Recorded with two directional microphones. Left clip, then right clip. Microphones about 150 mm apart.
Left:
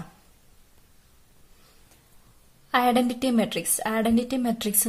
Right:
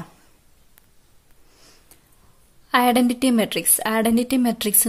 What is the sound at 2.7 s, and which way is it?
A woman's voice, 20° right (ahead or behind).